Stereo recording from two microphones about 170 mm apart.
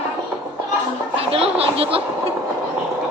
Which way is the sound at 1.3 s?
35° right (ahead or behind).